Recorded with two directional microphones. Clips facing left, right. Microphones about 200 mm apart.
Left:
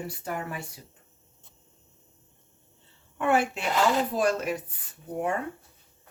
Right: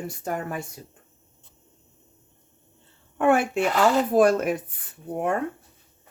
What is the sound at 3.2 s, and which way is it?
Speech, 50° right (ahead or behind).